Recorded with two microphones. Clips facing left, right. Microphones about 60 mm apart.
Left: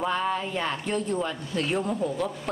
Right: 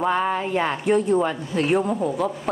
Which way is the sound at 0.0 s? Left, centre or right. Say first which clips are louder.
Right 5 dB; right.